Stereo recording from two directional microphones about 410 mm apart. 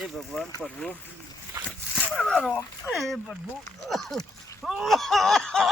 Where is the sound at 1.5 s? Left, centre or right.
Centre.